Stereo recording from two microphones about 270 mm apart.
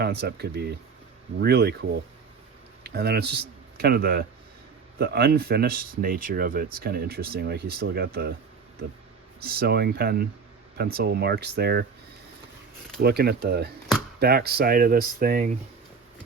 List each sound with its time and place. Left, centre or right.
0.0 s speech: right
9.4 s speech: right
13.0 s speech: right